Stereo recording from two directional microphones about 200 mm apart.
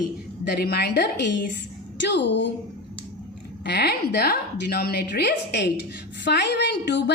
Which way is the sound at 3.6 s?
55° left (ahead or behind).